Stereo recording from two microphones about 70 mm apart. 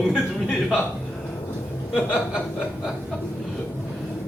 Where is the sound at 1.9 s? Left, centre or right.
Left.